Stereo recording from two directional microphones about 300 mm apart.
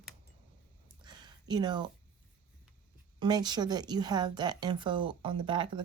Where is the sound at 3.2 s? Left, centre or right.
Centre.